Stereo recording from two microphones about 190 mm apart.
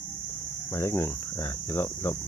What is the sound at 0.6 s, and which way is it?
Speech, 15° left (ahead or behind).